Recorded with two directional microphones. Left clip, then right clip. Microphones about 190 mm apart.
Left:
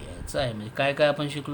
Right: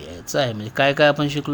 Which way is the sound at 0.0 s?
30° right (ahead or behind).